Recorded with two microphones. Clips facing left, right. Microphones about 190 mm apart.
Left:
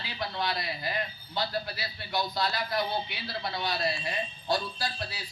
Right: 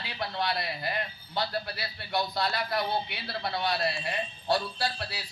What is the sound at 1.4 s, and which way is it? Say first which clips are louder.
A man's voice: even; 60° right (ahead or behind).